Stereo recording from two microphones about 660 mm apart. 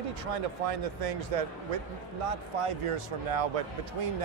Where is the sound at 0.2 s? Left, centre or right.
Right.